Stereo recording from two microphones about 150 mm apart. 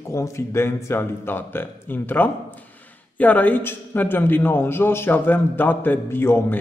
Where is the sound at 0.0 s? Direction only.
20° left (ahead or behind).